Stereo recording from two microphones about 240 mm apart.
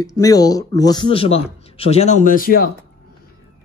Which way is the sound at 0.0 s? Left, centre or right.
Centre.